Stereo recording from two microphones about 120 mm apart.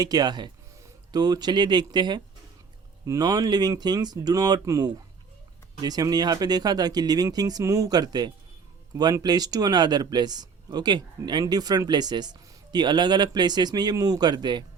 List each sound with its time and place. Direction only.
0.0 s speech: 35° right (ahead or behind)